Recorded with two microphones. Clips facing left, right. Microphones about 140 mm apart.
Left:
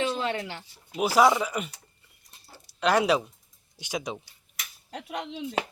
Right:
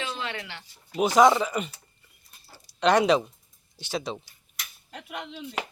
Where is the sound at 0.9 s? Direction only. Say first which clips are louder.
Right 2 dB; 5° left (ahead or behind).